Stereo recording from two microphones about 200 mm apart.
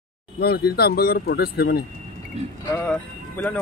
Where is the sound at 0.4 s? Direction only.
50° left (ahead or behind).